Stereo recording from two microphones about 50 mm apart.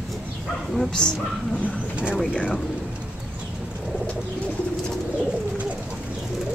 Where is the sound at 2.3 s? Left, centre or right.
Centre.